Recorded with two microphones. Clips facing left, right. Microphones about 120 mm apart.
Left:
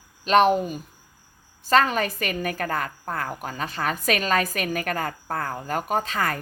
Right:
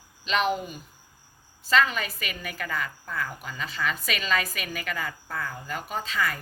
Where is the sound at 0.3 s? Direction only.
45° left (ahead or behind).